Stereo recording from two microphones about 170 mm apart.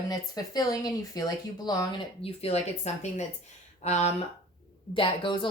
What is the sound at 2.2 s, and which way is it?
A woman's voice, 35° left (ahead or behind).